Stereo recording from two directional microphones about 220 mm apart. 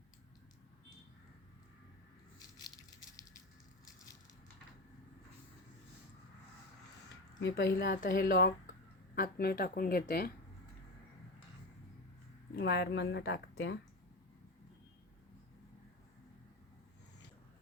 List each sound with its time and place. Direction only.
7.4 s speech: 50° left (ahead or behind)
12.5 s speech: 50° left (ahead or behind)